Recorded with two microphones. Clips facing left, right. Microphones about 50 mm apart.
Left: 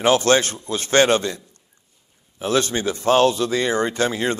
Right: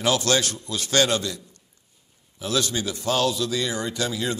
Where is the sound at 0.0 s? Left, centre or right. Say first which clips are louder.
Left 6 dB; left.